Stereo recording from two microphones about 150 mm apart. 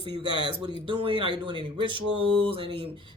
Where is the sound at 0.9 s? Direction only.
35° right (ahead or behind).